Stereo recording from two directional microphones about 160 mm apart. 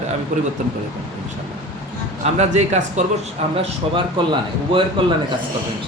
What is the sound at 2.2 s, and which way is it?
Speech, 45° right (ahead or behind).